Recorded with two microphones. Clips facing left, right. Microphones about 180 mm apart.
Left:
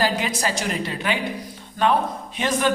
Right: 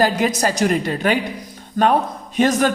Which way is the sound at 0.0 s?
45° right (ahead or behind).